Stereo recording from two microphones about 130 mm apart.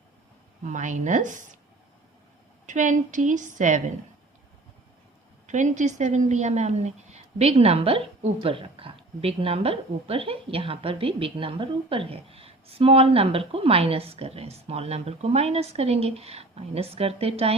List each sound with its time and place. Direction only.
0.6 s a woman's voice: 70° right (ahead or behind)
2.6 s a woman's voice: 75° right (ahead or behind)
5.5 s a woman's voice: 70° right (ahead or behind); by 17.5 s 50° right (ahead or behind)